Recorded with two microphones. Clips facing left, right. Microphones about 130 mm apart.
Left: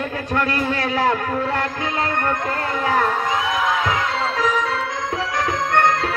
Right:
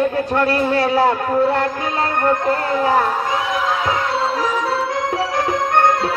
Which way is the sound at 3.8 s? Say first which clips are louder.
Right 3 dB; 25° right (ahead or behind).